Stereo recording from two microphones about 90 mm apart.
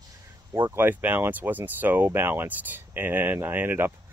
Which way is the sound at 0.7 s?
20° right (ahead or behind).